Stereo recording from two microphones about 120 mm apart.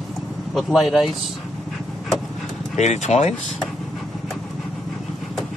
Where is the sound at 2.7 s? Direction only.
75° left (ahead or behind).